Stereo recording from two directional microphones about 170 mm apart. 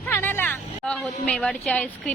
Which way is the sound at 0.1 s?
10° left (ahead or behind).